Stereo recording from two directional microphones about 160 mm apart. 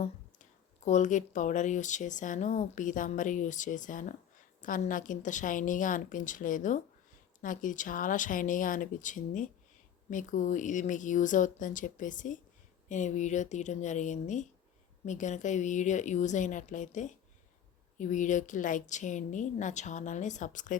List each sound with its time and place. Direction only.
0.9 s a woman's voice: 50° left (ahead or behind)